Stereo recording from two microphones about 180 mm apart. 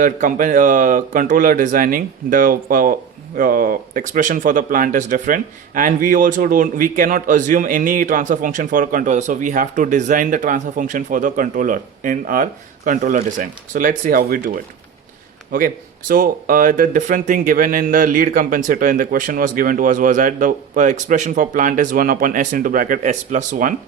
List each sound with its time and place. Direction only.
0.0 s speech: 45° right (ahead or behind)